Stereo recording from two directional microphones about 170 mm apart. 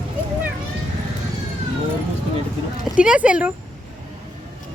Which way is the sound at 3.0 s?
5° right (ahead or behind).